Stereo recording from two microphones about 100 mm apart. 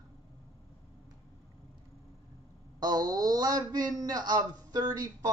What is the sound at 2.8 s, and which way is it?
A man's voice, 40° right (ahead or behind).